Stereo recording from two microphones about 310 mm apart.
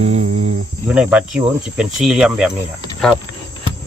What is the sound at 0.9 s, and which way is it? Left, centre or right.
Speech, centre.